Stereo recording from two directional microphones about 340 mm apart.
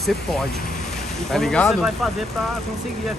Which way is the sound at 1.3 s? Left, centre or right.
Centre.